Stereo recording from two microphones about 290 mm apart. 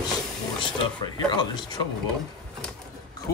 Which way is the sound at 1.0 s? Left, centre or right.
Centre.